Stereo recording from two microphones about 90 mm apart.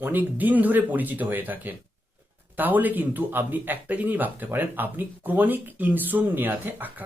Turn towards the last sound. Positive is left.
turn(degrees=-20)  # may be behind; listen again after turning